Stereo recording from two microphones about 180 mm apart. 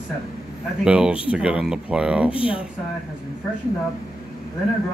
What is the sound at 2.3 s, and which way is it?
Speech, 30° left (ahead or behind).